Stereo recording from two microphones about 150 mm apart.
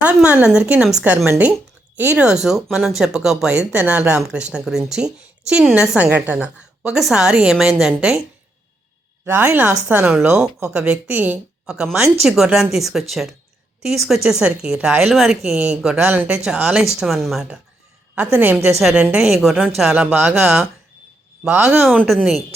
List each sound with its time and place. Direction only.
0.0 s a woman's voice: 10° right (ahead or behind)
9.2 s a woman's voice: 15° right (ahead or behind)